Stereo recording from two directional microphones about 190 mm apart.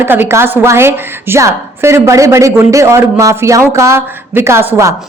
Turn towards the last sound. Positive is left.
turn(degrees=-15)  # may be behind; listen again after turning